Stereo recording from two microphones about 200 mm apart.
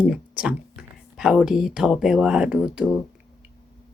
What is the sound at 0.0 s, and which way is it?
Speech, 5° right (ahead or behind).